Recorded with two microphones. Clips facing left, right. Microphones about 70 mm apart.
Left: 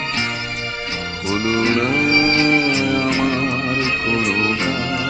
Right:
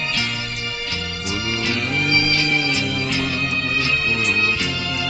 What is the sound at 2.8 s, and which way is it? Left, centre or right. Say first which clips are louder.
Music: left 6 dB; left.